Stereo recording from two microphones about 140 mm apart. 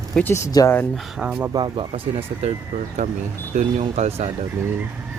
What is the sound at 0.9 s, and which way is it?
Speech, 5° right (ahead or behind).